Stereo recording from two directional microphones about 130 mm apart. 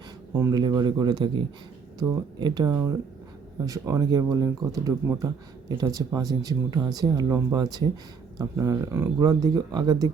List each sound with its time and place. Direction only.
0.5 s speech: 30° right (ahead or behind)
9.2 s speech: 30° right (ahead or behind)